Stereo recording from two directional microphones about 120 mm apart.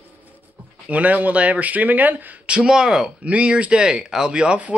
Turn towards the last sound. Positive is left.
turn(degrees=-10)  # may be behind; listen again after turning